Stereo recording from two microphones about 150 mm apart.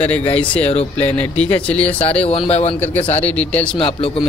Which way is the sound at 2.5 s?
45° left (ahead or behind).